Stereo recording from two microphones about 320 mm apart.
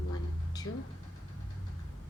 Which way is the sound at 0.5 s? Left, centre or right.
Centre.